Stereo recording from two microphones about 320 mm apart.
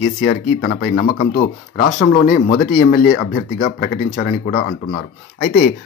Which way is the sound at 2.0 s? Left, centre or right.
Left.